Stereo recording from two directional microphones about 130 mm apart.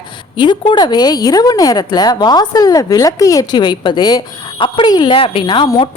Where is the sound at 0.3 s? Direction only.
35° left (ahead or behind).